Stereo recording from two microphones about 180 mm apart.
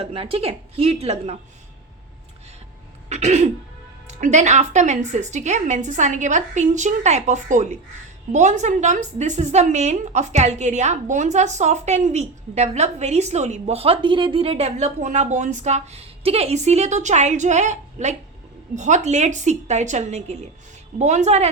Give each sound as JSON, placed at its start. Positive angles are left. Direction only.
{"t": 0.0, "sound": "a woman's voice", "side_deg": -30}
{"t": 3.1, "sound": "a woman's voice", "side_deg": -40}